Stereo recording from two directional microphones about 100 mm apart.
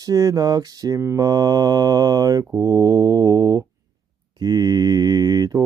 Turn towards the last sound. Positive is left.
turn(degrees=-40)  # may be behind; listen again after turning